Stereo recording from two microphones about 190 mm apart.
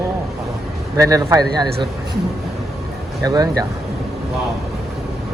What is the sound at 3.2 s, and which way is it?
Speech, 20° right (ahead or behind).